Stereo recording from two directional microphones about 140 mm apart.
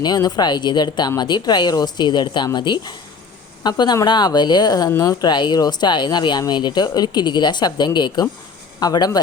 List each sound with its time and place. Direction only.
0.0 s speech: 30° left (ahead or behind)